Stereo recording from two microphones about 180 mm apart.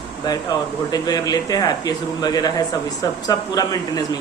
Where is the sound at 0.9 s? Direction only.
20° left (ahead or behind).